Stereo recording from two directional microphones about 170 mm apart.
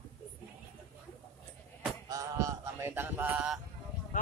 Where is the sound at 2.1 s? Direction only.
20° right (ahead or behind).